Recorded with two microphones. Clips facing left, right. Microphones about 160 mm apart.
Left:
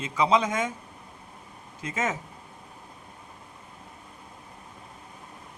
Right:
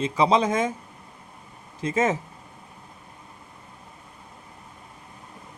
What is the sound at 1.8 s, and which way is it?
Speech, 30° right (ahead or behind).